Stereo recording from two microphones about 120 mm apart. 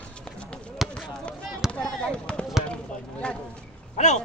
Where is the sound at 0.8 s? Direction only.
Centre (ahead or behind).